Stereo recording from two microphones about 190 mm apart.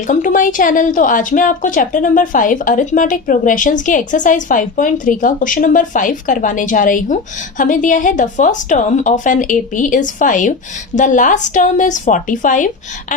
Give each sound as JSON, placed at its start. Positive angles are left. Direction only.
{"t": 0.1, "sound": "a woman's voice", "side_deg": 45}